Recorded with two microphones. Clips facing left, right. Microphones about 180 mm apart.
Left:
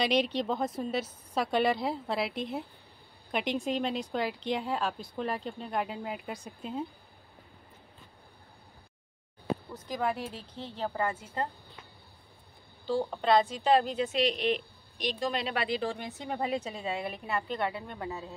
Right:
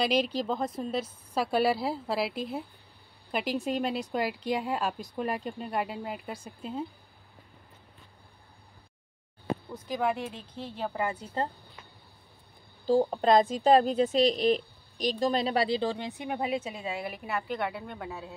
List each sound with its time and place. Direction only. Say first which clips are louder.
0.0 s a woman's voice: right 1 dB; centre (ahead or behind)
9.9 s a woman's voice: right 2 dB; 5° right (ahead or behind)
11.4 s speech: right 3 dB; 30° right (ahead or behind)
12.8 s a woman's voice: right 5 dB; 35° right (ahead or behind)
16.0 s speech: right 2 dB; 15° right (ahead or behind)